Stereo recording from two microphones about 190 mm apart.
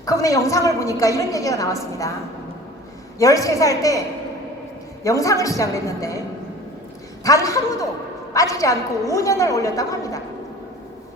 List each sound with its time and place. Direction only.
0.0 s a woman's voice: 15° left (ahead or behind)
3.2 s a woman's voice: 15° left (ahead or behind)
5.0 s a woman's voice: 15° left (ahead or behind)
7.3 s a woman's voice: 15° left (ahead or behind)